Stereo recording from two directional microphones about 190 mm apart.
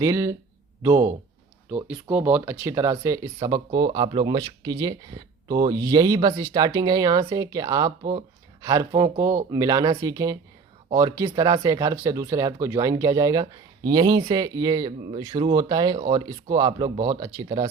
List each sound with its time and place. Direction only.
0.0 s speech: 15° right (ahead or behind)